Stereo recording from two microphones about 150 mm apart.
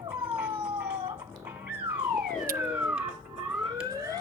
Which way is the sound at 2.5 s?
10° right (ahead or behind).